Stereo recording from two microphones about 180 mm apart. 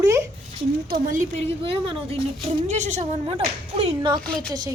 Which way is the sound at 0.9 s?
45° right (ahead or behind).